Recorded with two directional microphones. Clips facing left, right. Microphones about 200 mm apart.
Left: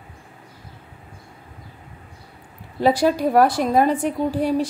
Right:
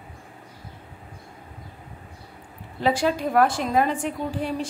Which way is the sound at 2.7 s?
40° left (ahead or behind).